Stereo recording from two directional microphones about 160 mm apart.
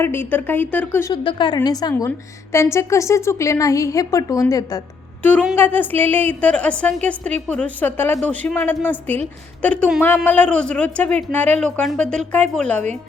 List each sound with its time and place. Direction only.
0.0 s a woman's voice: 15° left (ahead or behind)
1.1 s a woman's voice: 30° left (ahead or behind)
5.5 s a woman's voice: 10° left (ahead or behind)